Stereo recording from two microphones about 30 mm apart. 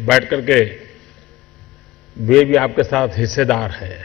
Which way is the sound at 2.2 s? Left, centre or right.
Centre.